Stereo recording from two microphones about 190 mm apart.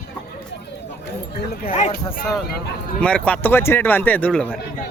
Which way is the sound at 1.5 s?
50° left (ahead or behind).